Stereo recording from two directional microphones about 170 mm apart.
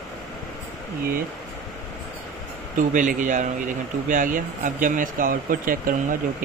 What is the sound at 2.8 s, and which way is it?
Speech, 50° right (ahead or behind).